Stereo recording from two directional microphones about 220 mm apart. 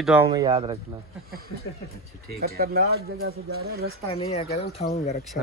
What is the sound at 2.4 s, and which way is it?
Speech, 45° right (ahead or behind).